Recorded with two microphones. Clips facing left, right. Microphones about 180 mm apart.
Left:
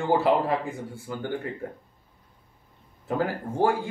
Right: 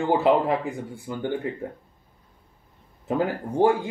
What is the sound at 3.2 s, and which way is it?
Speech, 20° right (ahead or behind).